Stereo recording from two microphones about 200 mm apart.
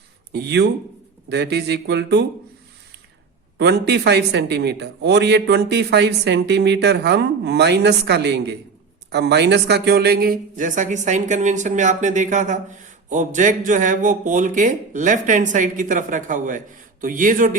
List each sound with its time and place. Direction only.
0.3 s speech: 55° right (ahead or behind)
3.6 s speech: 55° right (ahead or behind)